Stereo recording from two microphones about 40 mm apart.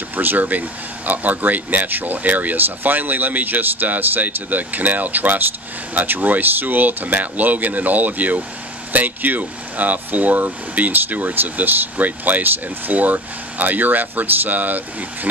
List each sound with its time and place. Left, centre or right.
0.1 s speech: right